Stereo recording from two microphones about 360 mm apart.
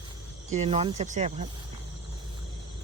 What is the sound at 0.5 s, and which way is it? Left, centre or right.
Speech, centre.